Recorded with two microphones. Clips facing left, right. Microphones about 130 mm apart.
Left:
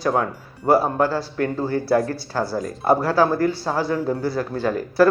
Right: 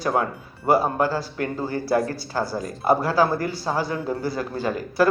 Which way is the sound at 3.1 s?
Centre (ahead or behind).